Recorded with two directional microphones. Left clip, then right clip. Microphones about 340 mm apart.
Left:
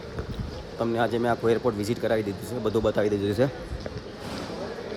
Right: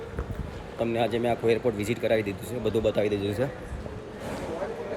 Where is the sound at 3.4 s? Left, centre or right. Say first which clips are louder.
Left 5 dB; left.